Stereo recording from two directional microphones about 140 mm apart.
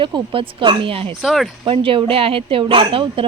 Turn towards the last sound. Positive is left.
turn(degrees=-40)  # may be behind; listen again after turning